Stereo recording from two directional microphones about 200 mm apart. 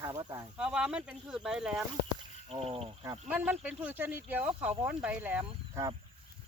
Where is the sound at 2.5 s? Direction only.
30° right (ahead or behind).